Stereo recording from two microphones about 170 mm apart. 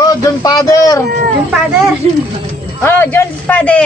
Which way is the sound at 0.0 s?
20° left (ahead or behind).